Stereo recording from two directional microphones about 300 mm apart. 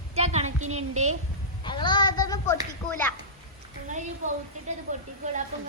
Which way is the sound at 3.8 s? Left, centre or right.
Right.